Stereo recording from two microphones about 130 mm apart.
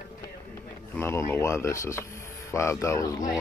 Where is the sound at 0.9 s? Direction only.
20° left (ahead or behind).